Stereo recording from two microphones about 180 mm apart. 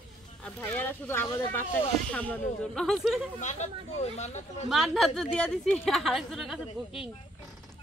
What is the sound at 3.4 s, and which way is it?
Speech, 40° left (ahead or behind).